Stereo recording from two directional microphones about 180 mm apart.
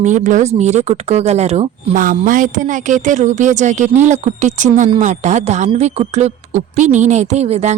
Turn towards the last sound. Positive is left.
turn(degrees=-35)  # may be behind; listen again after turning